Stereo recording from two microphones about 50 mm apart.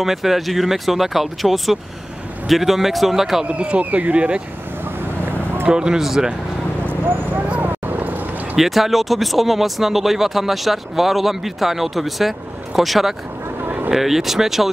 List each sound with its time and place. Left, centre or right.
0.0 s speech: centre
3.4 s speech: right
5.2 s vehicle: right
5.7 s speech: centre
6.9 s speech: right
7.4 s speech: right
7.8 s clip-clop: right
8.5 s speech: centre